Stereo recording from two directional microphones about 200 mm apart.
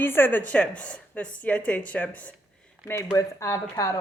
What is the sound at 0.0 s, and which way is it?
A woman's voice, 10° left (ahead or behind).